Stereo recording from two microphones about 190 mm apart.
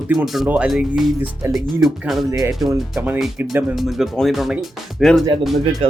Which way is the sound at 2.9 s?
5° right (ahead or behind).